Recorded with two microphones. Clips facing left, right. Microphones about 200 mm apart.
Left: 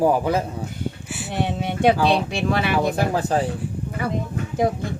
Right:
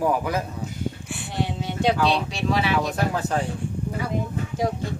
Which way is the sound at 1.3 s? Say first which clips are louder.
Left 4 dB; 60° left (ahead or behind).